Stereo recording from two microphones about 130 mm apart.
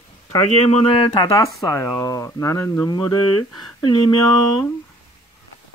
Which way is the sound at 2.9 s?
30° left (ahead or behind).